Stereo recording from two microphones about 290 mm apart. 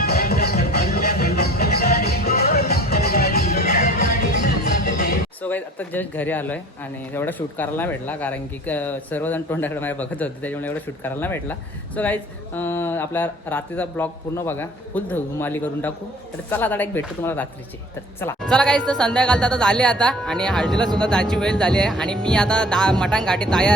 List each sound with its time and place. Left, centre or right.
0.0 s music: left
5.4 s a woman's voice: centre